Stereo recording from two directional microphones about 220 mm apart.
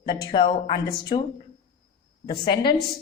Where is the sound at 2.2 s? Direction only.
20° left (ahead or behind).